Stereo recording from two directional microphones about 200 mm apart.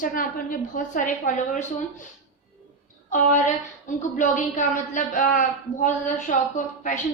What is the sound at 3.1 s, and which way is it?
A woman's voice, 40° left (ahead or behind).